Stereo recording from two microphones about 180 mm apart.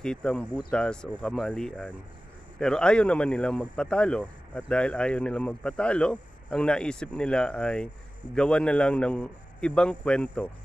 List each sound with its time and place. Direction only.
0.0 s speech: 5° left (ahead or behind)